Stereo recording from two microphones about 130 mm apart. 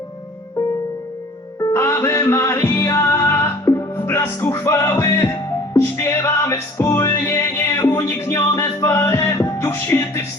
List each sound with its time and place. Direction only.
1.5 s music: 20° left (ahead or behind)